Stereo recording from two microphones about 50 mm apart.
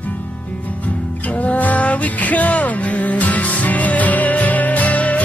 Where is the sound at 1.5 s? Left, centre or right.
Left.